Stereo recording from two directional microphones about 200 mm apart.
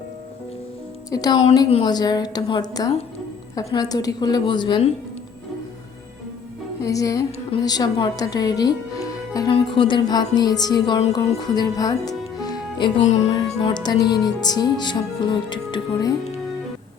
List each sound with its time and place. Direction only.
1.1 s speech: 20° left (ahead or behind)
6.8 s speech: 15° left (ahead or behind)
7.3 s speech: 30° left (ahead or behind)
7.6 s speech: 20° left (ahead or behind)
11.4 s music: 20° left (ahead or behind)
13.1 s speech: 35° left (ahead or behind)